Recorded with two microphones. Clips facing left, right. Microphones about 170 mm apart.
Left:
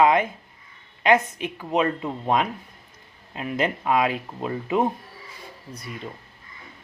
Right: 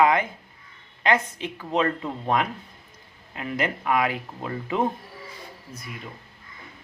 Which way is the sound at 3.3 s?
20° left (ahead or behind).